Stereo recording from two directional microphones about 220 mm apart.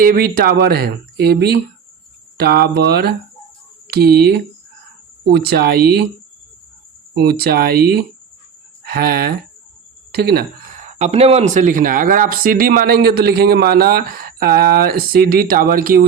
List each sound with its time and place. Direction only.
0.0 s speech: 40° right (ahead or behind)
5.3 s speech: 45° right (ahead or behind)
7.2 s speech: 45° right (ahead or behind)
10.1 s a sound: 45° right (ahead or behind)
10.8 s speech: 30° right (ahead or behind)